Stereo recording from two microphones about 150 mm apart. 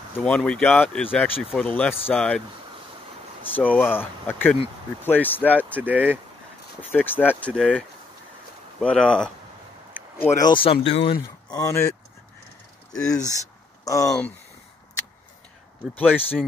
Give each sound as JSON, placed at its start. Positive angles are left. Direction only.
{"t": 0.2, "sound": "speech", "side_deg": 5}
{"t": 3.5, "sound": "speech", "side_deg": 10}
{"t": 5.8, "sound": "speech", "side_deg": -10}
{"t": 6.8, "sound": "speech", "side_deg": 10}
{"t": 8.8, "sound": "speech", "side_deg": 5}
{"t": 10.2, "sound": "speech", "side_deg": 20}
{"t": 10.5, "sound": "speech", "side_deg": 40}
{"t": 11.5, "sound": "speech", "side_deg": 20}
{"t": 13.1, "sound": "speech", "side_deg": 25}
{"t": 16.0, "sound": "speech", "side_deg": 10}